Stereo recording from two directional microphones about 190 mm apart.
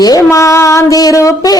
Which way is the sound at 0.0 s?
15° left (ahead or behind).